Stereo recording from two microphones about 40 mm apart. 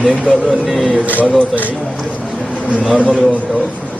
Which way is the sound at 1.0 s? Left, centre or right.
Right.